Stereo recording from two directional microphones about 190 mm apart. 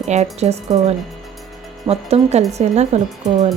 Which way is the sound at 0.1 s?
35° right (ahead or behind).